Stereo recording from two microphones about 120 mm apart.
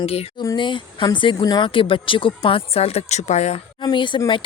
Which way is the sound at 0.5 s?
45° left (ahead or behind).